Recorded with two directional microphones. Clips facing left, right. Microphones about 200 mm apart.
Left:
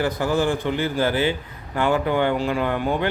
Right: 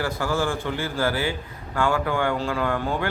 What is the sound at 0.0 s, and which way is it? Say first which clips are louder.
A man's voice: left 4 dB; 20° left (ahead or behind).